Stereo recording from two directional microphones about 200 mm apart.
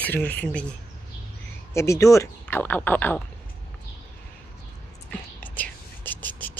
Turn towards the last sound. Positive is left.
turn(degrees=10)  # may be behind; listen again after turning